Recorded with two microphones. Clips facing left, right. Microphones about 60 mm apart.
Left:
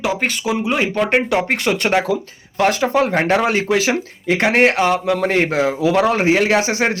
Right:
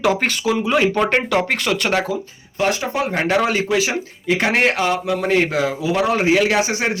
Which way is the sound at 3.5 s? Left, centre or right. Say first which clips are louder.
Left 2 dB; left.